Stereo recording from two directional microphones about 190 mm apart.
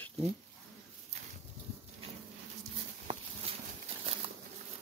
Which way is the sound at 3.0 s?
30° right (ahead or behind).